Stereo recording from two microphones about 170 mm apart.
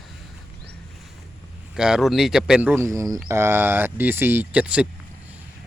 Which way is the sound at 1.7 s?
5° right (ahead or behind).